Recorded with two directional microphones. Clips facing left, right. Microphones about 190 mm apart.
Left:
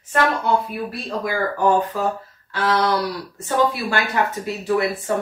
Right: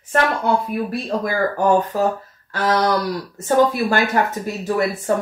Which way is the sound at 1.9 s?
40° right (ahead or behind).